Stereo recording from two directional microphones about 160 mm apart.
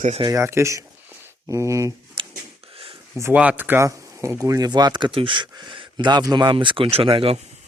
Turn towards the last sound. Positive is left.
turn(degrees=-35)  # may be behind; listen again after turning